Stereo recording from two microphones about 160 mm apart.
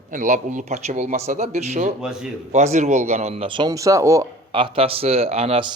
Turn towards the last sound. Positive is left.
turn(degrees=-40)  # may be behind; listen again after turning